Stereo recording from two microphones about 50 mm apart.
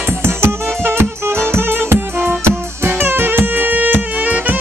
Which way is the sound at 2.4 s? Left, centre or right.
Right.